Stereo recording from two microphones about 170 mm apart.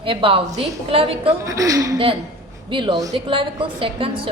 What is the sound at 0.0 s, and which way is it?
A woman's voice, 30° right (ahead or behind).